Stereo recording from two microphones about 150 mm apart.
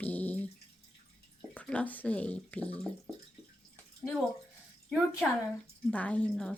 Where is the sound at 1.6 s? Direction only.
10° left (ahead or behind).